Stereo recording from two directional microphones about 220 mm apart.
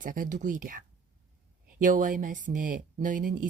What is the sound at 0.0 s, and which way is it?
Speech, 35° right (ahead or behind).